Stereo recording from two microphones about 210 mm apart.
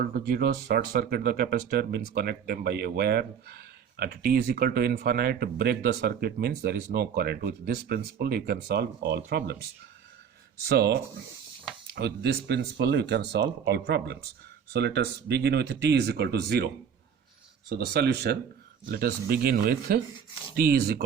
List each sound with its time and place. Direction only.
0.0 s speech: 45° right (ahead or behind)
10.7 s speech: 50° right (ahead or behind)
17.7 s speech: 45° right (ahead or behind)